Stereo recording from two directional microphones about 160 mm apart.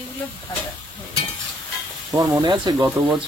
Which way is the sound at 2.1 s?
20° right (ahead or behind).